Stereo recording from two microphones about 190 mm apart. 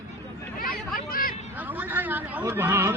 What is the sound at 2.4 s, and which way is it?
Speech, 15° right (ahead or behind).